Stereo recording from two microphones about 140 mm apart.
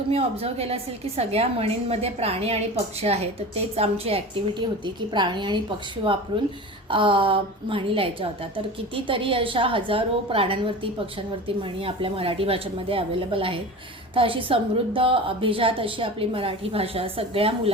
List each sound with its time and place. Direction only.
0.1 s a woman's voice: 45° right (ahead or behind)
4.6 s a woman's voice: 35° right (ahead or behind)
6.9 s a woman's voice: 35° right (ahead or behind)